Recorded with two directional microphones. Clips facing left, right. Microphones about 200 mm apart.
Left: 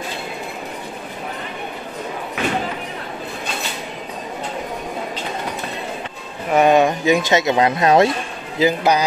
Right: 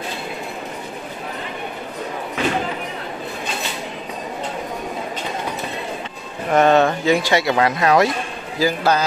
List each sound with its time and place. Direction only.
6.5 s speech: 10° left (ahead or behind)